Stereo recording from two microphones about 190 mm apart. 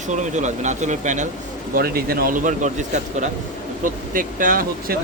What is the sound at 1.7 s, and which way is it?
Speech, 50° right (ahead or behind).